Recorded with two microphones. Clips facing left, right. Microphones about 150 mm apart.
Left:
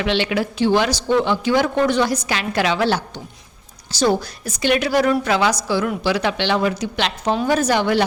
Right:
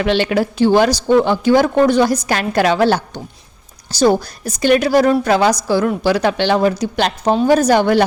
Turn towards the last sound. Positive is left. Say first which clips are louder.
# right 5 dB
turn(degrees=-45)  # may be behind; listen again after turning